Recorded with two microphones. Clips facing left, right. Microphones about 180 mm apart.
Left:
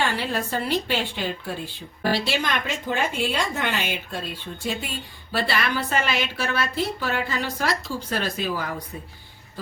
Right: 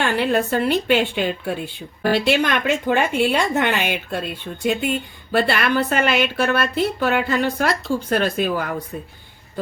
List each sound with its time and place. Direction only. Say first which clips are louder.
0.0 s a woman's voice: right 6 dB; 60° right (ahead or behind)